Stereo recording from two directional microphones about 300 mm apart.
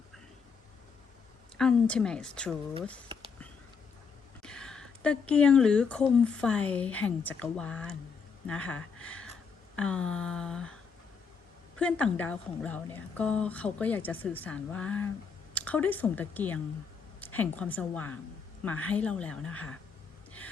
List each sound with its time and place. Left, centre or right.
1.5 s speech: centre
4.4 s speech: centre
11.8 s speech: centre